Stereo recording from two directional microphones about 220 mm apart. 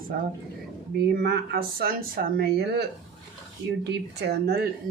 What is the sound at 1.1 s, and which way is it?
Speech, 45° right (ahead or behind).